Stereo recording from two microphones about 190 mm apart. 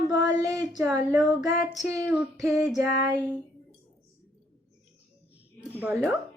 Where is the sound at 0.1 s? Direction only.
20° right (ahead or behind).